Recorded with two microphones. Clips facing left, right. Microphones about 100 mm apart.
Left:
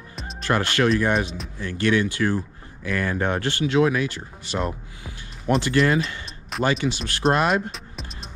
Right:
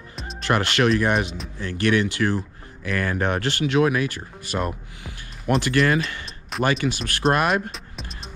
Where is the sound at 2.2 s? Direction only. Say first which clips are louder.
Even; 45° right (ahead or behind).